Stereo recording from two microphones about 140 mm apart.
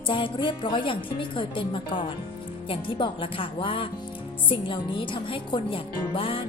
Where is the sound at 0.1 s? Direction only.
35° left (ahead or behind).